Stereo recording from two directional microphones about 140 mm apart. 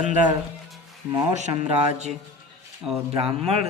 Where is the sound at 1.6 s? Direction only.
50° right (ahead or behind).